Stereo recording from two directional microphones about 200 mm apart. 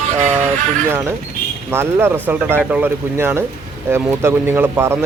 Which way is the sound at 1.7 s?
10° right (ahead or behind).